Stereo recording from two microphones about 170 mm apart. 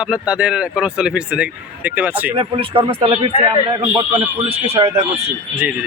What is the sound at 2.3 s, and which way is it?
A man's voice, 30° right (ahead or behind).